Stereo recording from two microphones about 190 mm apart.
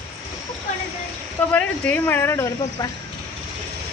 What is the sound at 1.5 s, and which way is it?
Speech, 10° left (ahead or behind).